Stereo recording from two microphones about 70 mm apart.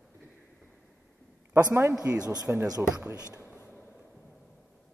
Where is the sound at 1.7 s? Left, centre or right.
Right.